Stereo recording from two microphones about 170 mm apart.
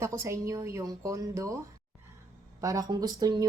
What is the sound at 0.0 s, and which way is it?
A woman's voice, 15° right (ahead or behind).